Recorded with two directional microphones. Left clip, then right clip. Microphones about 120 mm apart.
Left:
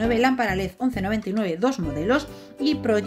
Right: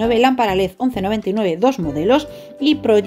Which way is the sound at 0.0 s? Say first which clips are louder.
Right 7 dB; 15° right (ahead or behind).